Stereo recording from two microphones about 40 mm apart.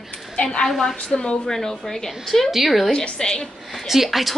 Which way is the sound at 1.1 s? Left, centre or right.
Centre.